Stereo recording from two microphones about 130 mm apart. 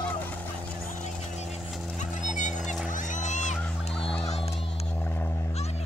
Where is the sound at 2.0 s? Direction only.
70° left (ahead or behind).